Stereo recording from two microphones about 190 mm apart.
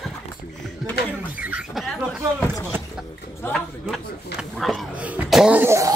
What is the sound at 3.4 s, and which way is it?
Speech, 5° left (ahead or behind).